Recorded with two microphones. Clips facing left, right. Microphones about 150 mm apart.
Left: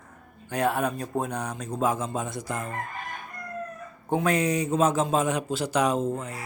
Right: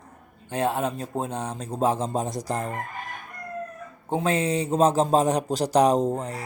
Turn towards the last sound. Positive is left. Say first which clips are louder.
# right 4 dB
turn(degrees=-35)  # may be behind; listen again after turning